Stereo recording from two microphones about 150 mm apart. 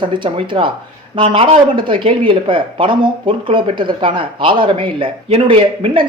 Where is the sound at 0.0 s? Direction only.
35° right (ahead or behind).